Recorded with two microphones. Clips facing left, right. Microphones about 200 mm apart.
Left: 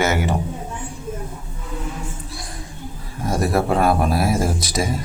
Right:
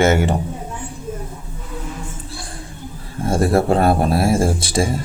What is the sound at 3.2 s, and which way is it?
Speech, 30° right (ahead or behind).